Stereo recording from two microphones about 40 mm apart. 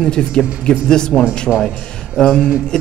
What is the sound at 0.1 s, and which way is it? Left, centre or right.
Speech, centre.